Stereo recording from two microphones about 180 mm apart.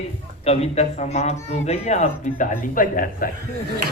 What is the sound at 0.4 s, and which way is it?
A man's voice, 35° left (ahead or behind).